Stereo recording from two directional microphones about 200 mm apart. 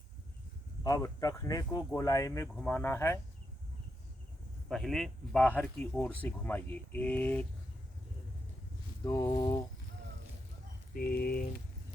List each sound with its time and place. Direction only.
0.9 s speech: 20° left (ahead or behind)
4.7 s speech: centre (ahead or behind)
9.0 s speech: 20° left (ahead or behind)
10.9 s speech: 50° left (ahead or behind)